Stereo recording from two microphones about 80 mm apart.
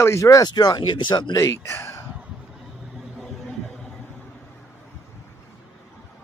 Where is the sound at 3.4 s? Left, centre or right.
Centre.